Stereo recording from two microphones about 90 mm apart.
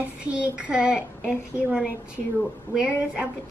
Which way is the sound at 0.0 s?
15° right (ahead or behind).